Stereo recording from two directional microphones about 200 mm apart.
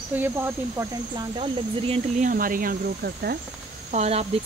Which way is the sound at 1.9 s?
40° right (ahead or behind).